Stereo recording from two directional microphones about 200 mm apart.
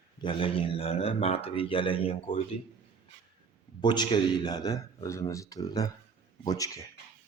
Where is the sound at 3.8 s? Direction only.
20° left (ahead or behind).